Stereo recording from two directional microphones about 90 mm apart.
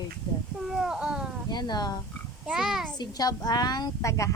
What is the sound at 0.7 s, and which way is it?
Speech, 5° right (ahead or behind).